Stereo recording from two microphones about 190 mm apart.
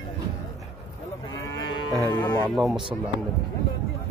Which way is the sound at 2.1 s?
25° left (ahead or behind).